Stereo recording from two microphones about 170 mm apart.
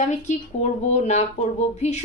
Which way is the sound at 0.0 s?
45° left (ahead or behind).